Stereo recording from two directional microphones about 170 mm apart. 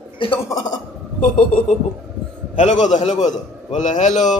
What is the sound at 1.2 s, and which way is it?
A man's voice, 50° left (ahead or behind).